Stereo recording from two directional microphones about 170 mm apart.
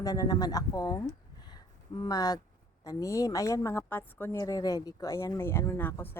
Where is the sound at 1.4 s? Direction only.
25° left (ahead or behind).